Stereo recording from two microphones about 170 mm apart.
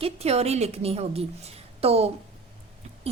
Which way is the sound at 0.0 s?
40° right (ahead or behind).